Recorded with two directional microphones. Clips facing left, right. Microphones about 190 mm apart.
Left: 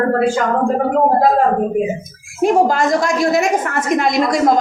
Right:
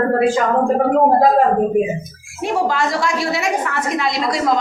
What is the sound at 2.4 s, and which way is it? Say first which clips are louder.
Speech: left 5 dB; 45° left (ahead or behind).